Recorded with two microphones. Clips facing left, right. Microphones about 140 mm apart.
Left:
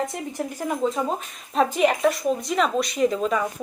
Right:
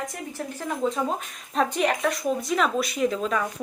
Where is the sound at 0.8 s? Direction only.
Centre (ahead or behind).